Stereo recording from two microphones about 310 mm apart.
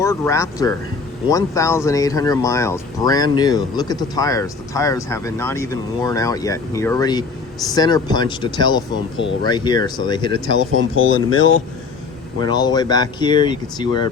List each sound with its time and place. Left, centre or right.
0.0 s speech: centre
9.1 s speech: left
9.5 s speech: centre
11.0 s speech: left
12.4 s speech: centre